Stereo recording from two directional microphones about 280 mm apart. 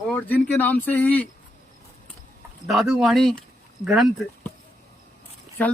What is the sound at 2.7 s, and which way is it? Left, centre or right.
Speech, centre.